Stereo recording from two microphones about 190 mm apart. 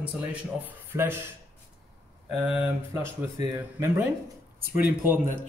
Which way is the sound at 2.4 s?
5° right (ahead or behind).